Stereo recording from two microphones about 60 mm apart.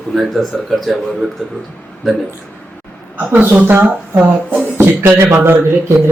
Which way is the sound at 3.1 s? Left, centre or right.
Right.